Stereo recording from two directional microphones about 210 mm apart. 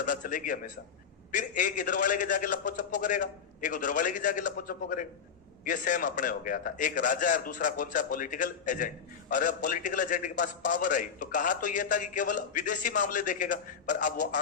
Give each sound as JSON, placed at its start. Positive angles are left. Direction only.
{"t": 0.0, "sound": "a man's voice", "side_deg": 40}